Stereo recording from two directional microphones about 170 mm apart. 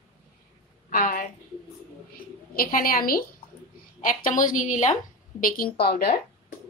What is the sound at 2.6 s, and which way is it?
A woman's voice, 55° left (ahead or behind).